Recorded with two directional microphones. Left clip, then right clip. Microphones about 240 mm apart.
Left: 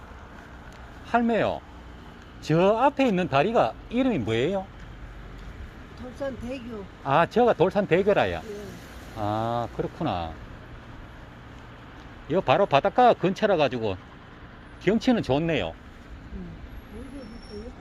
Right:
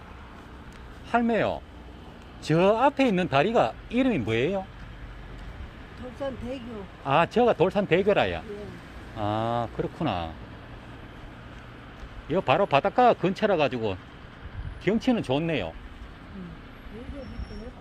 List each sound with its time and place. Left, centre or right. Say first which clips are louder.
1.1 s speech: left 1 dB; centre
6.1 s speech: left 1 dB; centre
12.3 s speech: left 1 dB; centre